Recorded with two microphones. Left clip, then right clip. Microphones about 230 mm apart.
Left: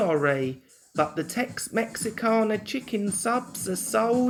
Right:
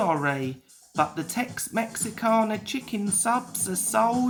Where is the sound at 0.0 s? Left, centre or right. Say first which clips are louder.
Left 1 dB; centre.